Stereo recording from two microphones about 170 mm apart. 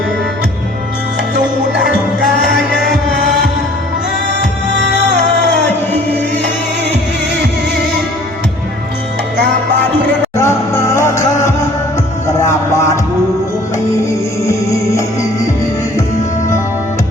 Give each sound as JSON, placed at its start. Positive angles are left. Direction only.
{"t": 10.3, "sound": "music", "side_deg": 15}
{"t": 14.4, "sound": "music", "side_deg": 15}